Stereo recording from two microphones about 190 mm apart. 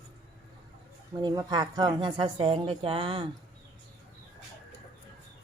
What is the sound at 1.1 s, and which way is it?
A woman's voice, 20° right (ahead or behind).